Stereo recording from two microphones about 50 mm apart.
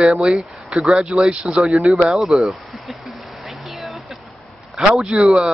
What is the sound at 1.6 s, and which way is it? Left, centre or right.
Speech, centre.